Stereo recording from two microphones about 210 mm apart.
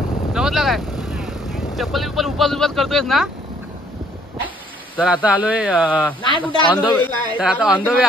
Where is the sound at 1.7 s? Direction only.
Centre (ahead or behind).